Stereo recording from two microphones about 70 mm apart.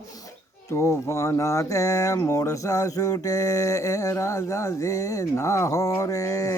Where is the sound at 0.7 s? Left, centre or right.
Left.